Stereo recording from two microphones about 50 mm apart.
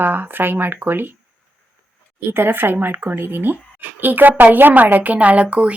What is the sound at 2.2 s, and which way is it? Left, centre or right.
Speech, right.